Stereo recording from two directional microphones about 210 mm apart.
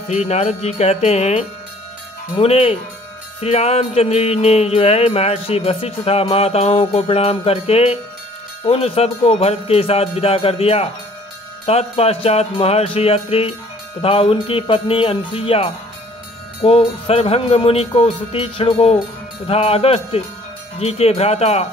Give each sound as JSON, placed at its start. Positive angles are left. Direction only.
{"t": 0.1, "sound": "jingle bell", "side_deg": 30}
{"t": 2.3, "sound": "music", "side_deg": 30}
{"t": 20.8, "sound": "jingle bell", "side_deg": 30}